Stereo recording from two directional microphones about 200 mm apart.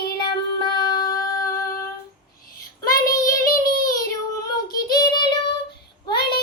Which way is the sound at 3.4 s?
45° left (ahead or behind).